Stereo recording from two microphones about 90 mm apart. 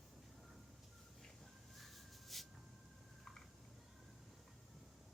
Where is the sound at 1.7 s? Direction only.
Centre (ahead or behind).